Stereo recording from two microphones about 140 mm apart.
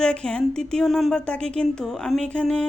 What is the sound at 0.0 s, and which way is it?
Speech, 5° left (ahead or behind).